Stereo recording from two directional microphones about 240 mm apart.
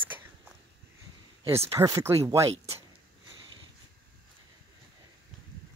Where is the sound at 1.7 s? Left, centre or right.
Centre.